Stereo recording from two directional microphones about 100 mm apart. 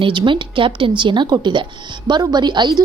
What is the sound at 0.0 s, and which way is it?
A woman's voice, 55° right (ahead or behind).